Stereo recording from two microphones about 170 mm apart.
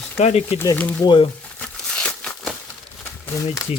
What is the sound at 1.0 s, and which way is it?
Speech, 30° left (ahead or behind).